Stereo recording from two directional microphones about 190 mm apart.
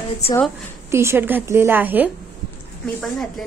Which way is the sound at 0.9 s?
15° right (ahead or behind).